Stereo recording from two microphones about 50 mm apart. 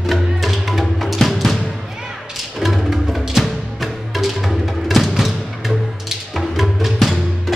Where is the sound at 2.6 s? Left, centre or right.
Centre.